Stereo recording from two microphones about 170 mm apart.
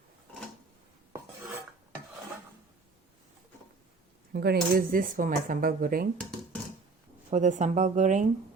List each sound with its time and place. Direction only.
4.3 s speech: 65° right (ahead or behind)
7.3 s speech: 45° right (ahead or behind)